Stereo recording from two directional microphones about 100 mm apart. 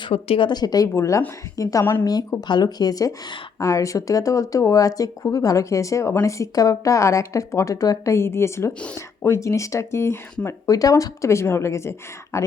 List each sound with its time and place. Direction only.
0.1 s a woman's voice: 65° left (ahead or behind); by 0.9 s 40° left (ahead or behind)
0.9 s speech: 30° left (ahead or behind)
1.8 s speech: 20° left (ahead or behind)
2.5 s speech: 45° left (ahead or behind); by 12.5 s 30° left (ahead or behind)